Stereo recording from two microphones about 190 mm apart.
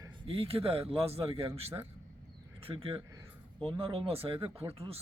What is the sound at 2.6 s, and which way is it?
Speech, 30° right (ahead or behind).